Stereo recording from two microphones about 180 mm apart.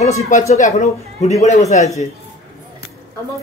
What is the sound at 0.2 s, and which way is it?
Speech, 45° left (ahead or behind).